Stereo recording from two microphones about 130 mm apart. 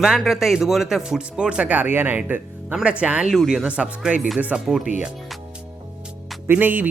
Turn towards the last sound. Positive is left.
turn(degrees=-15)  # may be behind; listen again after turning